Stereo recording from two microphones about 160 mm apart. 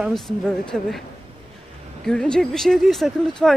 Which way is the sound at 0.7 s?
Centre (ahead or behind).